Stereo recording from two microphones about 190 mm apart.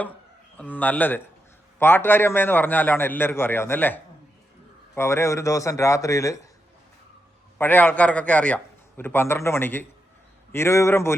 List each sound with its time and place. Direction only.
0.5 s a man's voice: 10° left (ahead or behind)
7.6 s a man's voice: 10° left (ahead or behind)